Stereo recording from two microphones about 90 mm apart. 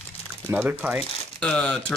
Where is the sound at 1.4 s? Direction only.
10° left (ahead or behind).